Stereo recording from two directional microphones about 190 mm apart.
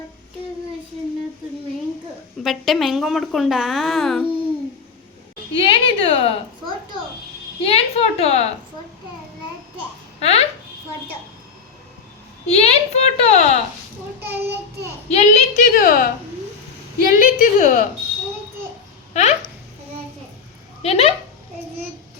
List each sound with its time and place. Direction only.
2.4 s a woman's voice: centre (ahead or behind)
5.5 s a woman's voice: 25° left (ahead or behind)
7.6 s a woman's voice: 30° left (ahead or behind)
10.2 s speech: 35° left (ahead or behind)
12.5 s a woman's voice: 35° left (ahead or behind)
14.3 s a child's voice: 55° right (ahead or behind)
15.1 s a woman's voice: 35° left (ahead or behind)
19.1 s speech: 35° left (ahead or behind)
20.8 s a woman's voice: 35° left (ahead or behind)